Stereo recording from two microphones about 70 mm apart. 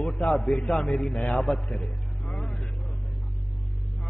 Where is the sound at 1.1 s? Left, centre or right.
Centre.